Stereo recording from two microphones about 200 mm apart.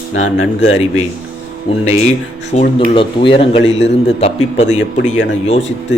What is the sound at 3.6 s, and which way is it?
Speech, 65° left (ahead or behind).